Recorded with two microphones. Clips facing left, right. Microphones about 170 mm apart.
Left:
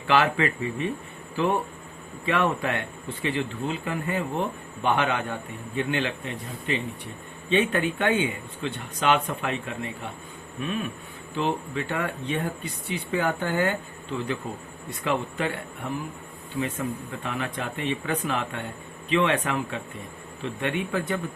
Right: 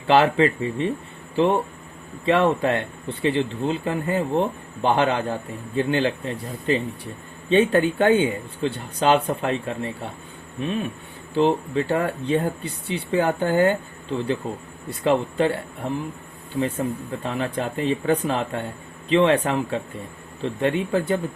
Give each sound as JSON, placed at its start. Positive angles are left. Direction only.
{"t": 0.1, "sound": "speech", "side_deg": -30}